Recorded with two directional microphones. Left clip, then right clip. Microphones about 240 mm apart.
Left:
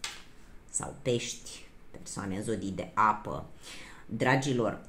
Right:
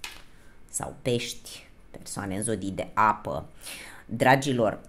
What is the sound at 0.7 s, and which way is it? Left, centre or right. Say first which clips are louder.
Speech: right 3 dB; right.